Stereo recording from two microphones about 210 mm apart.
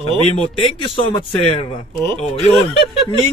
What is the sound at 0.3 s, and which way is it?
Speech, 25° left (ahead or behind).